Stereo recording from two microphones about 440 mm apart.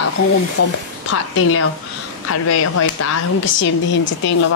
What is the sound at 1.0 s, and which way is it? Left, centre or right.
Speech, left.